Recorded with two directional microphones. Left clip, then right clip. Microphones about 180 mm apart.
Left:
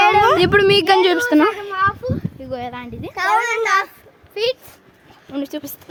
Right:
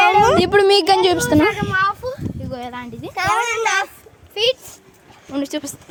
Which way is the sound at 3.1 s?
Centre (ahead or behind).